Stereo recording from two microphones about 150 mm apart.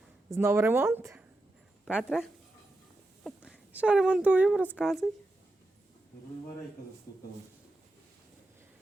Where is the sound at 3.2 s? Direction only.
Centre (ahead or behind).